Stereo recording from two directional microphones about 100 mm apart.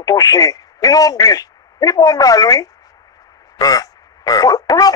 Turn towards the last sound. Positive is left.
turn(degrees=40)  # may be behind; listen again after turning